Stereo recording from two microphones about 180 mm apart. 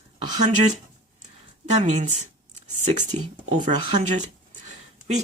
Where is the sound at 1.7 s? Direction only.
40° right (ahead or behind).